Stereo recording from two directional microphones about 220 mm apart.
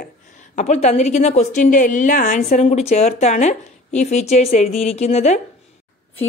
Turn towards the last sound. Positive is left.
turn(degrees=30)  # may be behind; listen again after turning